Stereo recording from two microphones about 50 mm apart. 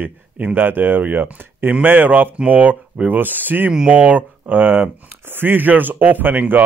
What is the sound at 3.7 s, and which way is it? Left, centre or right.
Speech, right.